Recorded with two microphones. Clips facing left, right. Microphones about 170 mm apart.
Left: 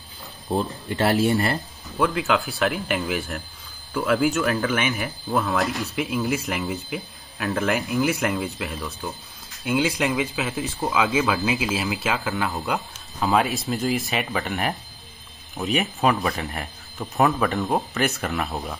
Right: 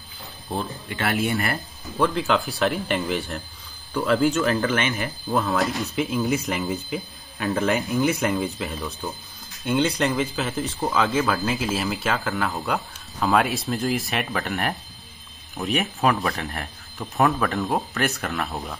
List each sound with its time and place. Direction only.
0.6 s speech: 35° left (ahead or behind)
2.0 s speech: centre (ahead or behind)